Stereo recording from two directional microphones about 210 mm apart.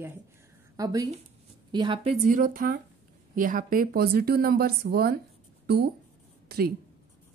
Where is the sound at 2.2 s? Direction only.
40° right (ahead or behind).